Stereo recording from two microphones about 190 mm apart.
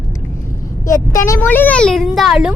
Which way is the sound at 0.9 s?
15° left (ahead or behind).